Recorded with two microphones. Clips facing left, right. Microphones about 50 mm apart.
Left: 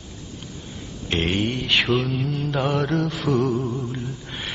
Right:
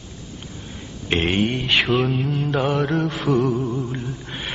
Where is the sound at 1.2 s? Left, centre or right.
Right.